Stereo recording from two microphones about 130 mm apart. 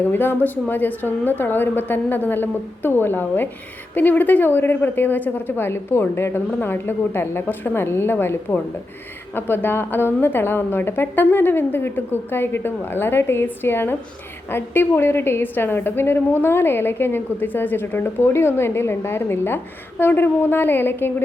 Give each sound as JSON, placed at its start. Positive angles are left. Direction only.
{"t": 0.0, "sound": "a woman's voice", "side_deg": 15}